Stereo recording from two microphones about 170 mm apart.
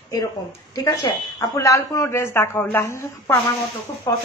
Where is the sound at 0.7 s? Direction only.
25° left (ahead or behind).